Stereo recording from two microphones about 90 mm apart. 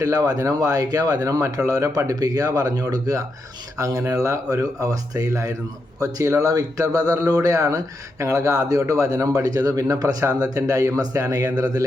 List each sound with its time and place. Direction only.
0.0 s speech: 40° right (ahead or behind)